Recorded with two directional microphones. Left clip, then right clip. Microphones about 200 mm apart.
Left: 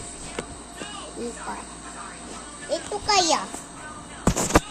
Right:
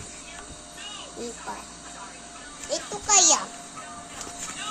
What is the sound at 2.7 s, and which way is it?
Speech, centre (ahead or behind).